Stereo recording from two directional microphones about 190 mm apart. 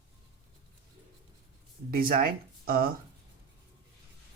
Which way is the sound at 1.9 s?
50° right (ahead or behind).